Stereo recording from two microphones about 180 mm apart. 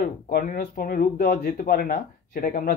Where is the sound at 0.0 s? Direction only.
50° left (ahead or behind).